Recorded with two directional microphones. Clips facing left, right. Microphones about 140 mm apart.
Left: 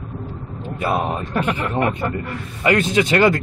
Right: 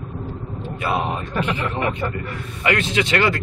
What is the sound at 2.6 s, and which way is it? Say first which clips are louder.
Speech: left 4 dB; 40° left (ahead or behind).